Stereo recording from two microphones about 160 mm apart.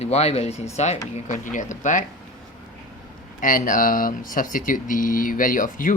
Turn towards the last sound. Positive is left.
turn(degrees=55)  # may be behind; listen again after turning